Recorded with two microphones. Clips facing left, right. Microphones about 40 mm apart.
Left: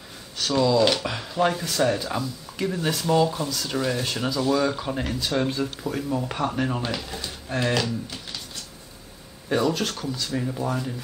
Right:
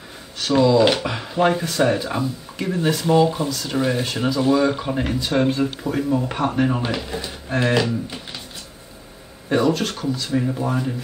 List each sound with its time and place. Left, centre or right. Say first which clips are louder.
0.4 s speech: right 5 dB; centre
3.7 s speech: right 4 dB; centre
9.5 s speech: right 4 dB; centre